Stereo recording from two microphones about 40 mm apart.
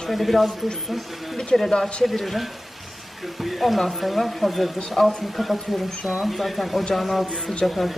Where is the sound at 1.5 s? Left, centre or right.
Centre.